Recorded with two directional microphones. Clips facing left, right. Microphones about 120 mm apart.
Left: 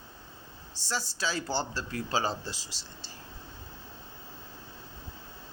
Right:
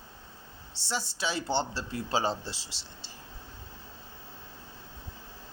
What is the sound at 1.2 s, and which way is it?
Speech, 25° right (ahead or behind).